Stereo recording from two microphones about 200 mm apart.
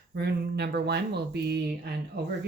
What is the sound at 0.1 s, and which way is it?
Speech, 55° right (ahead or behind).